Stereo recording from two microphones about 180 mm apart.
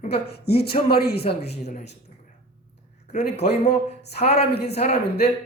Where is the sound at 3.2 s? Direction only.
65° left (ahead or behind).